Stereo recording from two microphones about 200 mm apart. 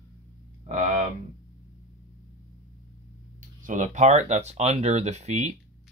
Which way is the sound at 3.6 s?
40° right (ahead or behind).